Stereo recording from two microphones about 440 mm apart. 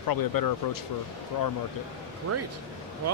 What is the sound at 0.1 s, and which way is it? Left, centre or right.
Speech, left.